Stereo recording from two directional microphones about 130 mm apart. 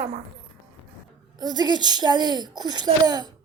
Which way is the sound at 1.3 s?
30° right (ahead or behind).